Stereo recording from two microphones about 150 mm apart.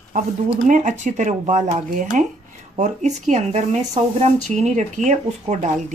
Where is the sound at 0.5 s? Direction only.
55° right (ahead or behind).